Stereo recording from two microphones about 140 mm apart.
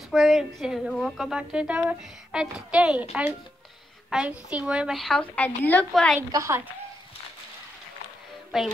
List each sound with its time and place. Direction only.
0.1 s a sound: centre (ahead or behind)
0.6 s speech: centre (ahead or behind)
6.3 s speech: 20° right (ahead or behind)
8.5 s speech: centre (ahead or behind)